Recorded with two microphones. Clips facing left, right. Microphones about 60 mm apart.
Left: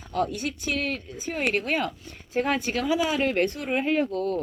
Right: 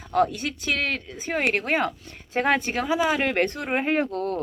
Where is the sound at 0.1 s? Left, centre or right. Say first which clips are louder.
Right 4 dB; right.